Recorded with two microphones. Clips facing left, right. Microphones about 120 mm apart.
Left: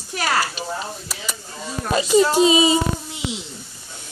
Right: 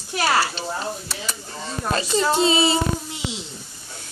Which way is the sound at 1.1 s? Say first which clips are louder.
Right 1 dB; 10° left (ahead or behind).